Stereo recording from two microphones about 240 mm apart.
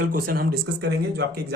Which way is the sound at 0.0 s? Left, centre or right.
Right.